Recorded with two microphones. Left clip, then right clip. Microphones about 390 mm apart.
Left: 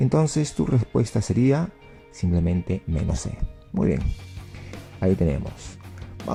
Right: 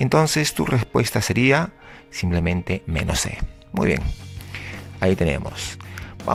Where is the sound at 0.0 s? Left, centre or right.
Right.